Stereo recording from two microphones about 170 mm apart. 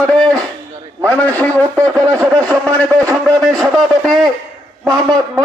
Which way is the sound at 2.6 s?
5° left (ahead or behind).